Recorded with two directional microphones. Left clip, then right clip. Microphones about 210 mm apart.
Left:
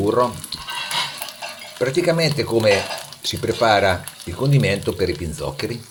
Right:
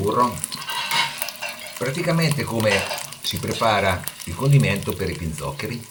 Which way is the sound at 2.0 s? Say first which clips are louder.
Left 2 dB; 35° left (ahead or behind).